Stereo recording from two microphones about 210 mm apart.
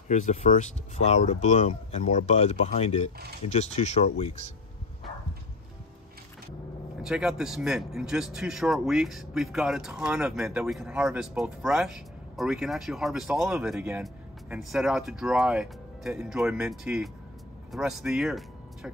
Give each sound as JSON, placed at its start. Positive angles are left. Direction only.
{"t": 0.1, "sound": "speech", "side_deg": 35}
{"t": 7.0, "sound": "speech", "side_deg": -5}